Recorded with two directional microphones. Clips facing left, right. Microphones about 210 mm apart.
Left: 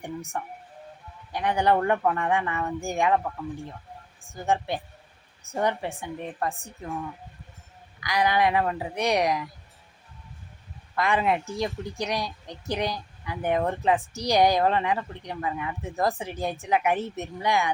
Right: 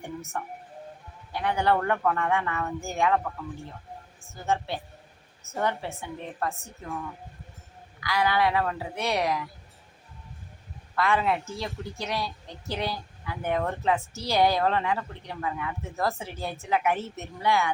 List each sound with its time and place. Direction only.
0.4 s a woman's voice: 15° left (ahead or behind)
4.2 s a woman's voice: 15° left (ahead or behind)
8.0 s a woman's voice: 15° left (ahead or behind)
10.9 s a woman's voice: 15° left (ahead or behind)